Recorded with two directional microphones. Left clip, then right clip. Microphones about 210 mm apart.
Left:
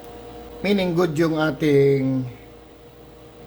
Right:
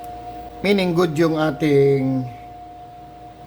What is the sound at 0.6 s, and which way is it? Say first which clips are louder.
A man's voice: right 2 dB; 15° right (ahead or behind).